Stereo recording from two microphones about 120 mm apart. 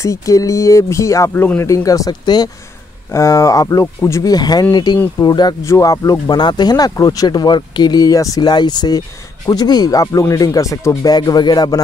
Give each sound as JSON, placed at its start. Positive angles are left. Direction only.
{"t": 0.0, "sound": "speech", "side_deg": 25}